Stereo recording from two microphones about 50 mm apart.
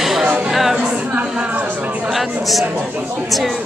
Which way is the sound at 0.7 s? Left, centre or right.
Right.